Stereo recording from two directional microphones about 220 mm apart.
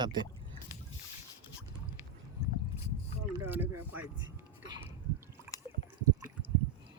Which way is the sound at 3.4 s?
10° right (ahead or behind).